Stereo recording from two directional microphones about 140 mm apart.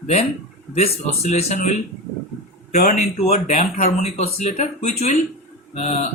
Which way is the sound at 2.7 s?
55° left (ahead or behind).